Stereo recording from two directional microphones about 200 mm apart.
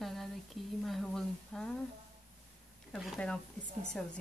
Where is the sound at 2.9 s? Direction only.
5° left (ahead or behind).